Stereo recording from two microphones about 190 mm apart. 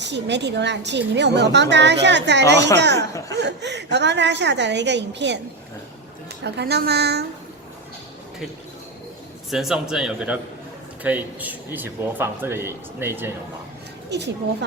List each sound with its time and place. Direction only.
0.0 s a woman's voice: 65° right (ahead or behind)
3.1 s speech: 20° left (ahead or behind)
3.3 s a woman's voice: 65° right (ahead or behind)
6.4 s a woman's voice: 60° right (ahead or behind)
9.5 s a man's voice: centre (ahead or behind)